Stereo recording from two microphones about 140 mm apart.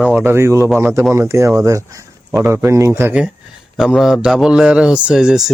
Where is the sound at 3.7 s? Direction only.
Centre (ahead or behind).